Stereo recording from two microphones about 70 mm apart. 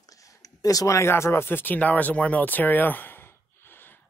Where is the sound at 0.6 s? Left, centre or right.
Left.